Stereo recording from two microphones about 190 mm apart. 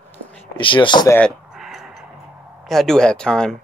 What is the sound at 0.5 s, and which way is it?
Speech, 25° left (ahead or behind).